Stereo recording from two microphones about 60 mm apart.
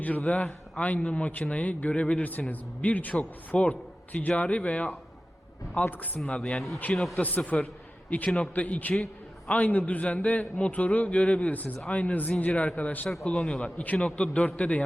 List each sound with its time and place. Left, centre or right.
0.3 s a man's voice: left
6.2 s a man's voice: centre
7.2 s a man's voice: left
13.2 s a man's voice: centre
13.7 s a man's voice: left